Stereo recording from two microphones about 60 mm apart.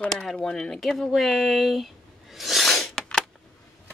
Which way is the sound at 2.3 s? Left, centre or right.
Centre.